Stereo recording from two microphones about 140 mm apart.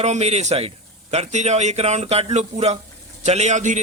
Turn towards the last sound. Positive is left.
turn(degrees=-60)  # may be behind; listen again after turning